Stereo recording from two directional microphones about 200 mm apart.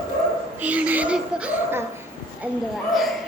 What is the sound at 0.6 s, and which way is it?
Laughter, 5° right (ahead or behind).